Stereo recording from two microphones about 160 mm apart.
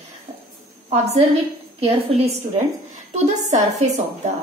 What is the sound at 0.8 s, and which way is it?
Speech, 40° right (ahead or behind).